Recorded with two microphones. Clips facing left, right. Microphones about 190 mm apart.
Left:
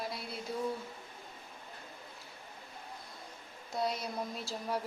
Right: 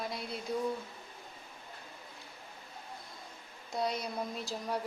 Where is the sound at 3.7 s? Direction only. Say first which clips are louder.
Right 1 dB; centre (ahead or behind).